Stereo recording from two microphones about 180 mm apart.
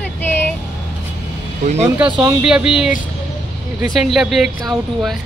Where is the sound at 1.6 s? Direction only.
40° right (ahead or behind).